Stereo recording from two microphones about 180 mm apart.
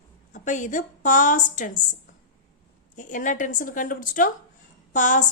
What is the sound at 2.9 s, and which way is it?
A woman's voice, 45° left (ahead or behind).